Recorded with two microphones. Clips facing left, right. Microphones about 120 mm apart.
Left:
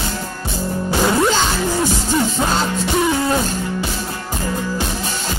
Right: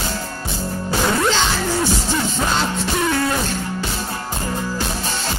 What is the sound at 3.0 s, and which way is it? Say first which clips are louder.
Beatboxing: left 1 dB; 15° left (ahead or behind).